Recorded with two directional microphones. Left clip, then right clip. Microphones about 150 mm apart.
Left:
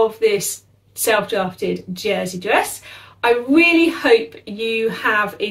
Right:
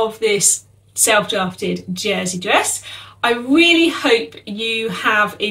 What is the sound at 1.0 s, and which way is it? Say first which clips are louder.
Speech: right 2 dB; 10° right (ahead or behind).